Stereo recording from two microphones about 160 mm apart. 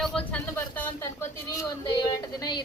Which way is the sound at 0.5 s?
15° left (ahead or behind).